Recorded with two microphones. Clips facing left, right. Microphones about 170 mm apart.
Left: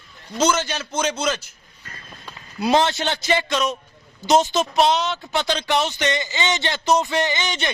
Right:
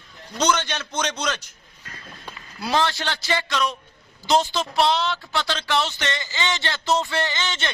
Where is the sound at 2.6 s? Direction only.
20° left (ahead or behind).